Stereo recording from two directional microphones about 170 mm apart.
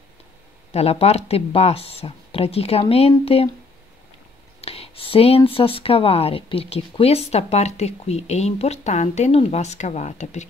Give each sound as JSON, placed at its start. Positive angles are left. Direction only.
{"t": 0.7, "sound": "speech", "side_deg": 35}
{"t": 4.6, "sound": "speech", "side_deg": 35}